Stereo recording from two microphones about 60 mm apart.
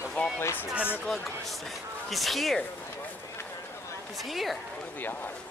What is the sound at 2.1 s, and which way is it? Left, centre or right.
Speech, centre.